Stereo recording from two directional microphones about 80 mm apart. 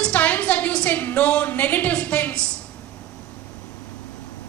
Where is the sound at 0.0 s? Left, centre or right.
Centre.